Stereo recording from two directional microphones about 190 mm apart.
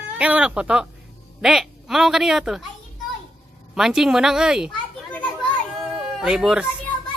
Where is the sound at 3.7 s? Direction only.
5° right (ahead or behind).